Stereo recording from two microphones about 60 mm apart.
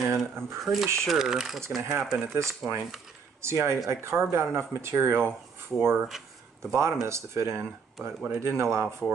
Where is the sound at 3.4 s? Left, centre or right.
Right.